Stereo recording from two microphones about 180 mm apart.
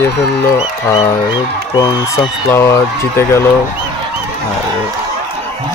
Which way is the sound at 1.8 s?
15° left (ahead or behind).